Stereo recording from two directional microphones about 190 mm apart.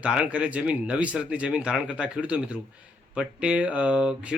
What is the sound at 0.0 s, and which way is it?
Speech, 5° right (ahead or behind).